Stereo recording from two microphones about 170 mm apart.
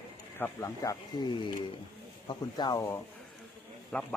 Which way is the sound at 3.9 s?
5° left (ahead or behind).